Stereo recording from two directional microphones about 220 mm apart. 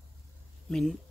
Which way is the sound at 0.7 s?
5° left (ahead or behind).